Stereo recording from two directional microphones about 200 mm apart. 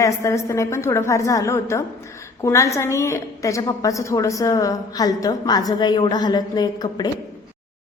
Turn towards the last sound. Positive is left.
turn(degrees=20)  # may be behind; listen again after turning